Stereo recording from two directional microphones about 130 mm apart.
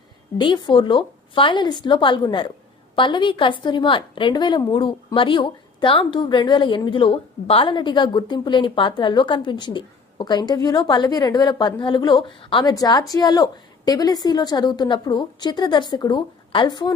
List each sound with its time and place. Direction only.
0.4 s a woman's voice: 40° left (ahead or behind)